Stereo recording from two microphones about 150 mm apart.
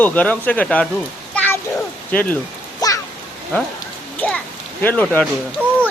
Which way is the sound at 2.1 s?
10° left (ahead or behind).